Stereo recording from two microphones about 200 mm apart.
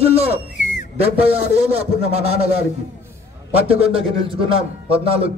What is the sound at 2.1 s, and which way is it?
Speech, 30° right (ahead or behind).